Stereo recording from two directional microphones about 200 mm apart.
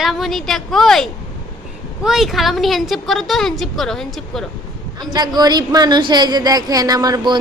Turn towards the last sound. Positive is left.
turn(degrees=-20)  # may be behind; listen again after turning